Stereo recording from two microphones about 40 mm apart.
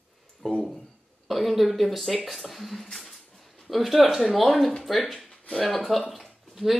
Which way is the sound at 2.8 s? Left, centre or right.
Centre.